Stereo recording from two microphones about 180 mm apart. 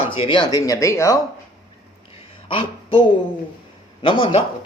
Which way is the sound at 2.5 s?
30° left (ahead or behind).